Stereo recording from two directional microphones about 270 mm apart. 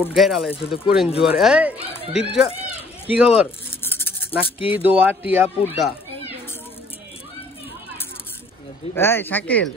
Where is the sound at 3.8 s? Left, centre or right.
Centre.